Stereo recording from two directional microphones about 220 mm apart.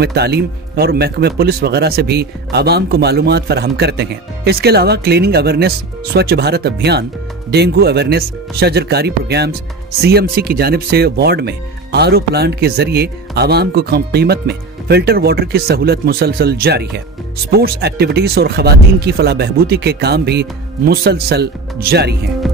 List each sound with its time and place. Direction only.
0.0 s speech: 45° right (ahead or behind)